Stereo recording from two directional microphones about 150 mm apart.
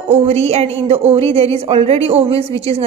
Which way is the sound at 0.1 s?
45° right (ahead or behind).